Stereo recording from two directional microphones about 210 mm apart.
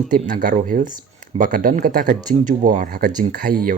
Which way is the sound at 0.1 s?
40° right (ahead or behind).